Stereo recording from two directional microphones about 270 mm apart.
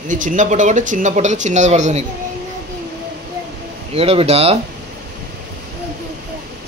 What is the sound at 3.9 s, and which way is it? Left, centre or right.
Speech, right.